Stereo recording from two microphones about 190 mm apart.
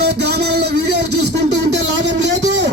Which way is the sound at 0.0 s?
60° right (ahead or behind).